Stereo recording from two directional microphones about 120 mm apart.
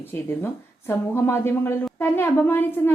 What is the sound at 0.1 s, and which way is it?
A woman's voice, 20° left (ahead or behind).